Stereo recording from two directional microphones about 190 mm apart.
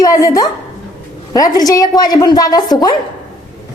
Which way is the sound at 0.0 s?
15° left (ahead or behind).